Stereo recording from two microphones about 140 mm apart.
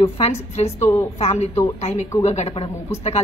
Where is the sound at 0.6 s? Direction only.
50° left (ahead or behind).